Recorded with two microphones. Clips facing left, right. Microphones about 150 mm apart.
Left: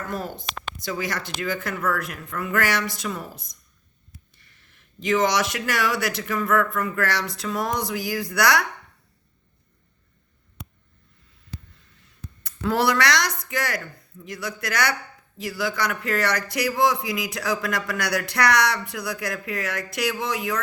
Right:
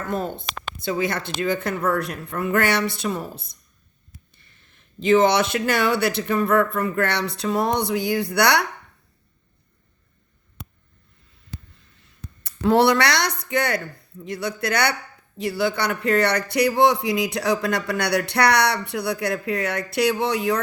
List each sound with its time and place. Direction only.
0.1 s speech: 25° right (ahead or behind)
12.4 s speech: 30° right (ahead or behind)